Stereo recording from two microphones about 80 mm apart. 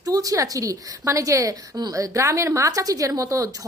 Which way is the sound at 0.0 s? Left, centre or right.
Right.